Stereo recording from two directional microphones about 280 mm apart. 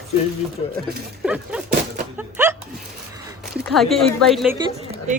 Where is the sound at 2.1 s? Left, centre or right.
Centre.